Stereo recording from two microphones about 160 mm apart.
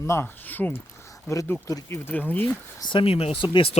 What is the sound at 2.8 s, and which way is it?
Speech, 30° left (ahead or behind).